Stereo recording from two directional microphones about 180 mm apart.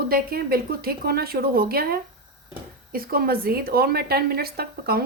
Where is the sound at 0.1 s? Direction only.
55° right (ahead or behind).